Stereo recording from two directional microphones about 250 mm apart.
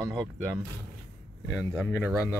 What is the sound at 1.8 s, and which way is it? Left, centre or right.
Speech, centre.